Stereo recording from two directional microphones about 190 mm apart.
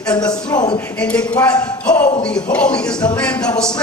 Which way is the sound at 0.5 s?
20° left (ahead or behind).